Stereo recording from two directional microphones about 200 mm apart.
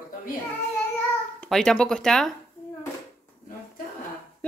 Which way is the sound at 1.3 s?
5° left (ahead or behind).